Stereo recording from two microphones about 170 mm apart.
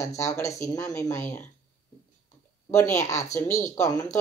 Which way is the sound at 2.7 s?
15° left (ahead or behind).